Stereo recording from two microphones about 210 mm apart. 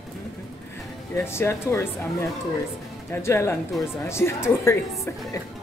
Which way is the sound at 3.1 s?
10° left (ahead or behind).